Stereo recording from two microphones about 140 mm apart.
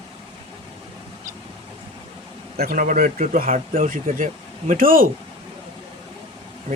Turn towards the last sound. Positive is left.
turn(degrees=-80)